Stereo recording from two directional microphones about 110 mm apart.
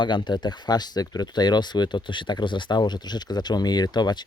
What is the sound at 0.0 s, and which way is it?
Speech, 45° left (ahead or behind).